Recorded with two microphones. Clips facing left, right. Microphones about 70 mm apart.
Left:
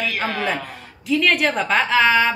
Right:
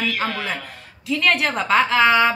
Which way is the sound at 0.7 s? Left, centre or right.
Centre.